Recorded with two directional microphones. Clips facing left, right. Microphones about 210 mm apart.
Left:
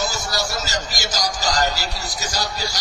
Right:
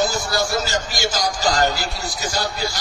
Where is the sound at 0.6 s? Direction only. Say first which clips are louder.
Right 4 dB; 40° left (ahead or behind).